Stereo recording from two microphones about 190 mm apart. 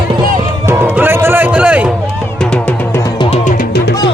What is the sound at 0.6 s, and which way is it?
Music, 10° right (ahead or behind).